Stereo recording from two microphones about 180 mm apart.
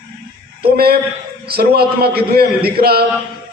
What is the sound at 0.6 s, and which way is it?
A man's voice, 60° right (ahead or behind).